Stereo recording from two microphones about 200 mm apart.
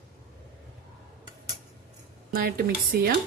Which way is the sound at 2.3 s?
50° right (ahead or behind).